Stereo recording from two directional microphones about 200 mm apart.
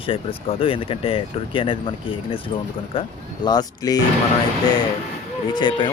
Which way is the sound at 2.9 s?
25° left (ahead or behind).